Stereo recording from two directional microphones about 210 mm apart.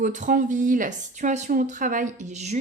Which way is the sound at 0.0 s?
35° right (ahead or behind).